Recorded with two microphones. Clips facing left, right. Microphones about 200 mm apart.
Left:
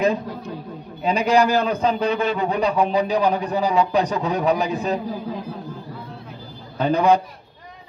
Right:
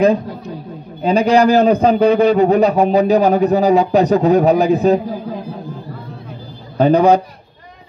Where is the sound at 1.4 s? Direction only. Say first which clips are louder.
Right 8 dB; 45° right (ahead or behind).